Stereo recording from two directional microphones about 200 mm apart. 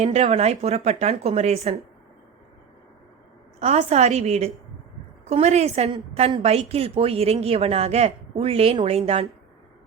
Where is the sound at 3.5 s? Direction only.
30° right (ahead or behind).